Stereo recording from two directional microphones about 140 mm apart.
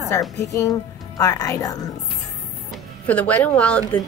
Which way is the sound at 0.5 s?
25° left (ahead or behind).